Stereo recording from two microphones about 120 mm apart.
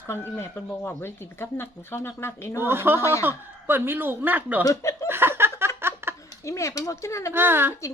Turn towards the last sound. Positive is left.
turn(degrees=-20)  # may be behind; listen again after turning